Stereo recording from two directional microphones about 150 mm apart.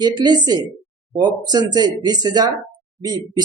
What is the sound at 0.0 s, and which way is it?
Speech, 30° right (ahead or behind).